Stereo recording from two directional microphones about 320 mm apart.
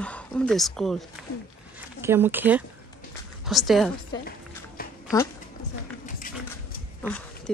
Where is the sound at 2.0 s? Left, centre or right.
Centre.